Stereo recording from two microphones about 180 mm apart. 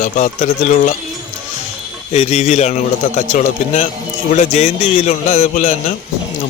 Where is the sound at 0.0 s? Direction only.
45° left (ahead or behind).